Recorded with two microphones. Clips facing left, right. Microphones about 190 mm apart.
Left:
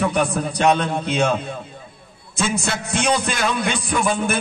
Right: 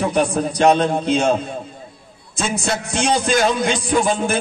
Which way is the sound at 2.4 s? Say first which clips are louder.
Right 1 dB; 55° left (ahead or behind).